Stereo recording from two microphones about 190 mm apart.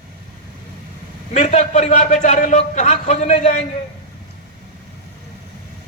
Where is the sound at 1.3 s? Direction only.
35° left (ahead or behind).